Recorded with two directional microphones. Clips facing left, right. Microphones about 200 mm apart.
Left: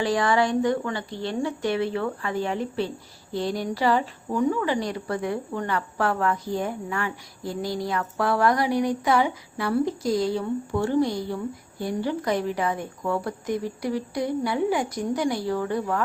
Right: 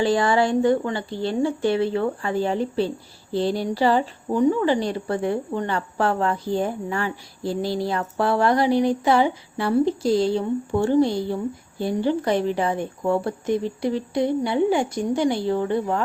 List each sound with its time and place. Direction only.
0.0 s a woman's voice: 30° right (ahead or behind)